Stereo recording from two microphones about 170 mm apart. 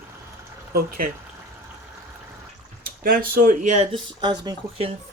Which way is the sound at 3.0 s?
55° right (ahead or behind).